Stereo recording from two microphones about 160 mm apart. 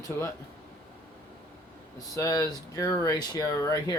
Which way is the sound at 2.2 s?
20° left (ahead or behind).